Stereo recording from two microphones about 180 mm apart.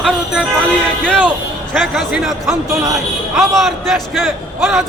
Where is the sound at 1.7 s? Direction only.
Centre (ahead or behind).